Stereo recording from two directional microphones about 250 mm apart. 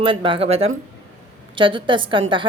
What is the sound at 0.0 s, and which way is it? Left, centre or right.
Speech, centre.